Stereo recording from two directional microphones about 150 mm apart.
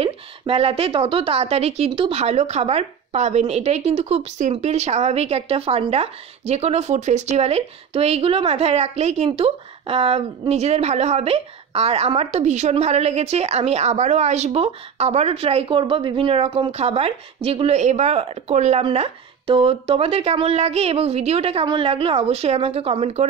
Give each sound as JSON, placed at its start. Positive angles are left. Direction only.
{"t": 0.0, "sound": "speech", "side_deg": -40}